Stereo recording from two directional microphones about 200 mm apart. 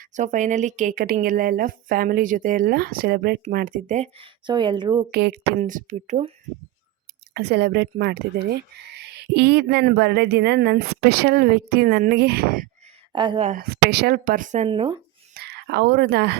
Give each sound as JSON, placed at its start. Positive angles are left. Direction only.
{"t": 0.0, "sound": "speech", "side_deg": -40}
{"t": 5.1, "sound": "speech", "side_deg": -55}
{"t": 5.5, "sound": "speech", "side_deg": -40}
{"t": 7.3, "sound": "speech", "side_deg": -55}
{"t": 13.1, "sound": "speech", "side_deg": -25}
{"t": 13.5, "sound": "speech", "side_deg": -50}
{"t": 14.7, "sound": "speech", "side_deg": -25}
{"t": 15.4, "sound": "speech", "side_deg": -55}